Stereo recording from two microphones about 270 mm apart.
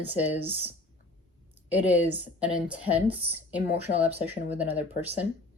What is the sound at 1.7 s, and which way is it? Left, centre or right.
Speech, centre.